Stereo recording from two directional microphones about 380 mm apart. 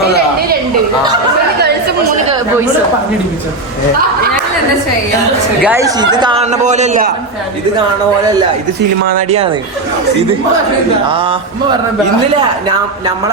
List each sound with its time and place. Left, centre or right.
0.0 s a sound: right
5.6 s a man's voice: centre
9.0 s a man's voice: centre
11.1 s a man's voice: centre